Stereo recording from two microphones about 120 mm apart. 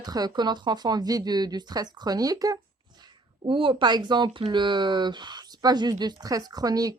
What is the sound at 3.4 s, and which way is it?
Speech, 45° right (ahead or behind).